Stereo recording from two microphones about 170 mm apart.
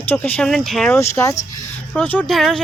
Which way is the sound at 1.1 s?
15° left (ahead or behind).